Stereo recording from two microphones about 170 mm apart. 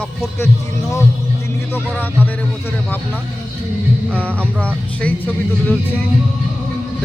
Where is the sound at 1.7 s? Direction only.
10° left (ahead or behind).